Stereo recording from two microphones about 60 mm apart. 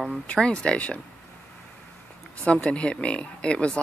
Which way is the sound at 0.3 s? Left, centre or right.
Centre.